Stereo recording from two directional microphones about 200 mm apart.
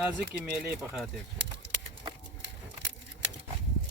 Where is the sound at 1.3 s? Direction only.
60° right (ahead or behind).